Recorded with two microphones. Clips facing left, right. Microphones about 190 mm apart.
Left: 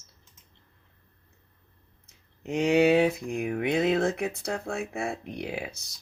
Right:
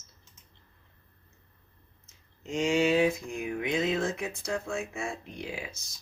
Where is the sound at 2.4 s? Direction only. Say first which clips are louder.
Left 4 dB; 60° left (ahead or behind).